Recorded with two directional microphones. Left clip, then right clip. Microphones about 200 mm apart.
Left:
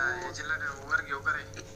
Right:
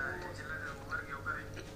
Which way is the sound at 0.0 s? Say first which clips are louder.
Left 9 dB; 45° left (ahead or behind).